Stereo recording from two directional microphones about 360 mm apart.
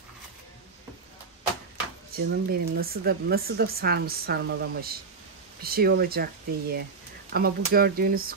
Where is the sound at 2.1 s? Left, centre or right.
Right.